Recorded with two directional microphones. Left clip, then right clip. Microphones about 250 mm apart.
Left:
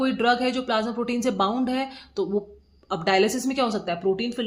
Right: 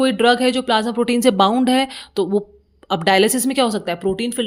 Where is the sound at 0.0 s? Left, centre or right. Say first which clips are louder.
Right 7 dB; right.